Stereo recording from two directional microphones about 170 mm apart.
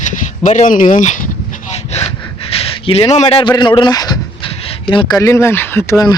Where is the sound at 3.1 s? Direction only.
35° left (ahead or behind).